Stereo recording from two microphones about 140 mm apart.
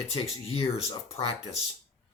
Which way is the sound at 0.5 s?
45° left (ahead or behind).